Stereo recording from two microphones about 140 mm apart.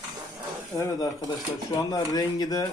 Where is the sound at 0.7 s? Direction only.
25° left (ahead or behind).